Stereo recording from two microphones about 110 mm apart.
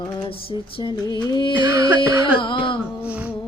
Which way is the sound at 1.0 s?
40° left (ahead or behind).